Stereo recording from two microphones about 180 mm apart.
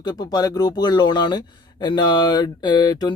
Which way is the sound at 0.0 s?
25° left (ahead or behind).